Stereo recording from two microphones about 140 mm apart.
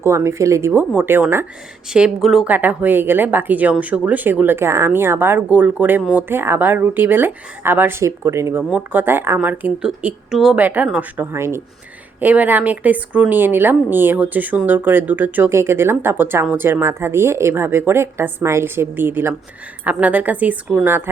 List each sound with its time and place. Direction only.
0.0 s speech: 20° right (ahead or behind)
1.9 s speech: 5° right (ahead or behind)
11.3 s speech: 20° right (ahead or behind)